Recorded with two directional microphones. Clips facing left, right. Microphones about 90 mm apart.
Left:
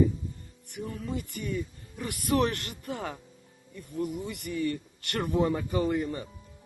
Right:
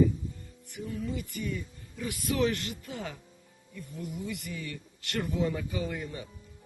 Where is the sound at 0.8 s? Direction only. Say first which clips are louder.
Left 1 dB; 50° left (ahead or behind).